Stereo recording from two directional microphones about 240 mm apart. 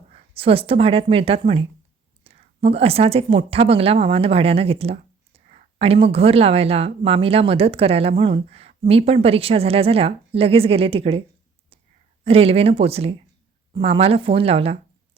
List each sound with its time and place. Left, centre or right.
0.1 s a woman's voice: right
12.2 s a woman's voice: right